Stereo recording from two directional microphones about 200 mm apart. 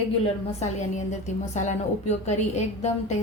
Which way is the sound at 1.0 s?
35° left (ahead or behind).